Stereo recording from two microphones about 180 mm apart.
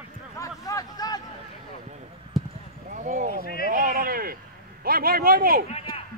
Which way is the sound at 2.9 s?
45° right (ahead or behind).